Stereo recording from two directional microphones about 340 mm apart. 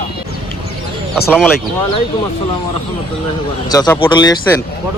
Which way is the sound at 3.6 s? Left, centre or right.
Centre.